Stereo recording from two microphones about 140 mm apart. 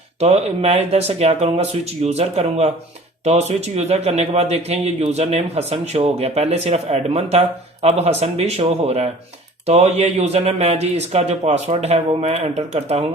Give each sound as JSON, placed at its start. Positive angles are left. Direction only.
{"t": 0.2, "sound": "a man's voice", "side_deg": -50}